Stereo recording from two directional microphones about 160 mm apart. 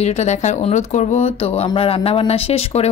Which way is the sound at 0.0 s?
45° left (ahead or behind).